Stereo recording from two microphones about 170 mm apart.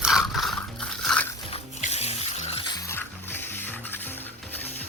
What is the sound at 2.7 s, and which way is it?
Music, 15° left (ahead or behind).